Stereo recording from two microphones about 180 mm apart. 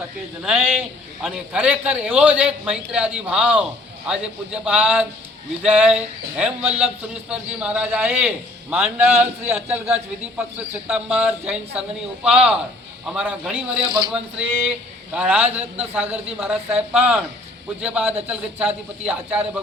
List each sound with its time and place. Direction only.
0.4 s a man's voice: 5° right (ahead or behind)
10.8 s a man's voice: 5° right (ahead or behind)